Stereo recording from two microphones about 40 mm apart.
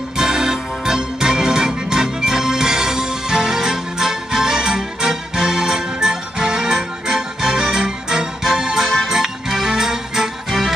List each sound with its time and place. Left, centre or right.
0.2 s music: centre